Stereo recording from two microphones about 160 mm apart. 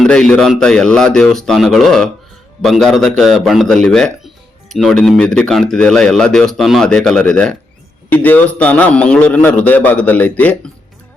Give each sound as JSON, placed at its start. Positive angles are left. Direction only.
{"t": 0.0, "sound": "a man's voice", "side_deg": 5}